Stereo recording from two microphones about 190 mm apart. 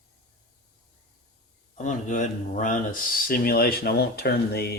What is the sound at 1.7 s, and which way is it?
Speech, 40° left (ahead or behind).